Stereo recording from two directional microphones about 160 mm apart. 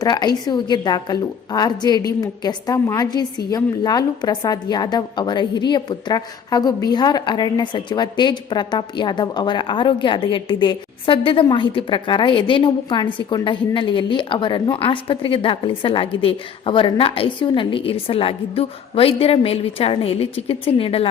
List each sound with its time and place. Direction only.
0.0 s a woman's voice: 25° left (ahead or behind)